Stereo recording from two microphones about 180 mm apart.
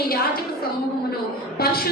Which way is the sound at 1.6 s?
55° left (ahead or behind).